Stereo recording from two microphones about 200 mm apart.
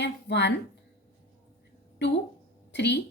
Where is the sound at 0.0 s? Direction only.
60° left (ahead or behind).